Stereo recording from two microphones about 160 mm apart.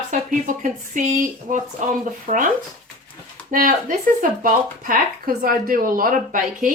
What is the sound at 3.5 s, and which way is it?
A woman's voice, 60° right (ahead or behind).